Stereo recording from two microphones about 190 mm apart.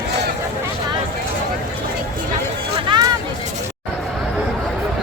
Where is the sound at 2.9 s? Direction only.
25° right (ahead or behind).